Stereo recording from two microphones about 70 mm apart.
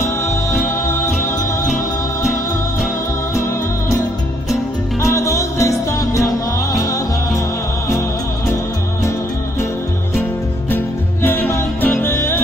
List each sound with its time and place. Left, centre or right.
0.0 s music: left
5.0 s music: left
11.8 s music: left